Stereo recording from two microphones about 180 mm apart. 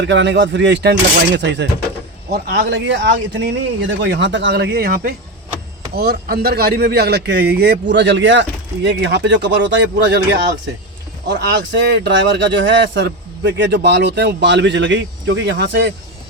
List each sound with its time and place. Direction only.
0.0 s speech: 80° right
2.3 s speech: 65° right (ahead or behind)
11.3 s speech: 75° right (ahead or behind)